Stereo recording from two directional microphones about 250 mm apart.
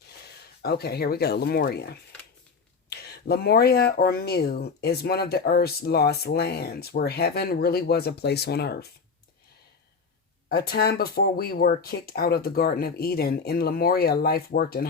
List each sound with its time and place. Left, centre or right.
0.6 s speech: left
10.5 s speech: left